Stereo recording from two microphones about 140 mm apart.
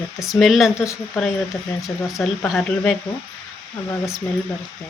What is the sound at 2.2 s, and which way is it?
Speech, centre (ahead or behind).